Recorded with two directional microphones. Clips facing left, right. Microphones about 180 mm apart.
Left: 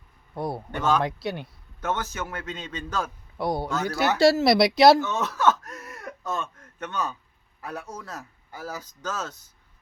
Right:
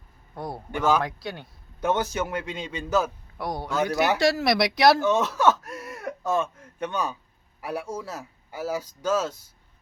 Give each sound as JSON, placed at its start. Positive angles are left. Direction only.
{"t": 0.3, "sound": "speech", "side_deg": 25}
{"t": 0.7, "sound": "speech", "side_deg": -10}
{"t": 1.0, "sound": "speech", "side_deg": 25}
{"t": 1.8, "sound": "speech", "side_deg": -15}
{"t": 3.3, "sound": "speech", "side_deg": 25}
{"t": 3.7, "sound": "speech", "side_deg": -10}
{"t": 4.2, "sound": "speech", "side_deg": 30}
{"t": 5.0, "sound": "a sound", "side_deg": -10}
{"t": 7.6, "sound": "speech", "side_deg": -10}